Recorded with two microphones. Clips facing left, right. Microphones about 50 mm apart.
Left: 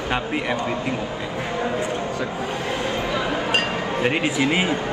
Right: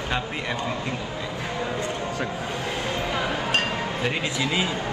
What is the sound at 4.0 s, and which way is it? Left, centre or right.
Speech, left.